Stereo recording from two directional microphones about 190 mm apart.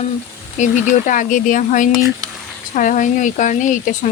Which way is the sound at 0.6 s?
45° left (ahead or behind).